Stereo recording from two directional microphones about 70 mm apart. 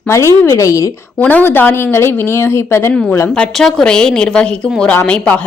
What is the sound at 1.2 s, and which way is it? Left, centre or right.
Speech, left.